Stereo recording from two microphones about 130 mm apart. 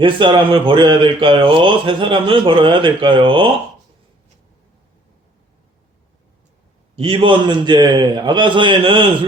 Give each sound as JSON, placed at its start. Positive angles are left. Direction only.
{"t": 0.0, "sound": "speech", "side_deg": -40}
{"t": 6.9, "sound": "speech", "side_deg": -45}